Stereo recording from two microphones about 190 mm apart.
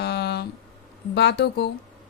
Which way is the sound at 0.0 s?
60° left (ahead or behind).